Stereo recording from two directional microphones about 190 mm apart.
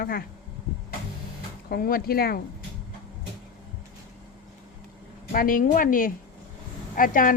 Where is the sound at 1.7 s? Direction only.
50° left (ahead or behind).